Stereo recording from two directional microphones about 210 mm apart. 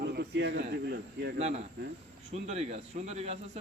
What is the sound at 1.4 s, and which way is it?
A man's voice, 30° right (ahead or behind).